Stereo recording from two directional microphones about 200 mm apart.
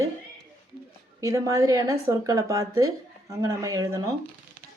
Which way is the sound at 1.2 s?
15° right (ahead or behind).